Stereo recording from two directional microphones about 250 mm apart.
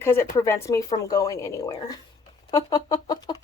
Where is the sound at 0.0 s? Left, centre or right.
Centre.